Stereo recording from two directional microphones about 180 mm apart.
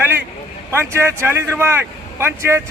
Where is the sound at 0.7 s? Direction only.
15° right (ahead or behind).